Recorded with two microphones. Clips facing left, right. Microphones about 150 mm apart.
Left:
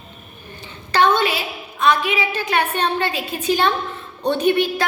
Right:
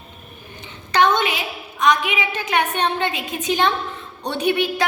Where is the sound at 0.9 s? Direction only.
15° right (ahead or behind).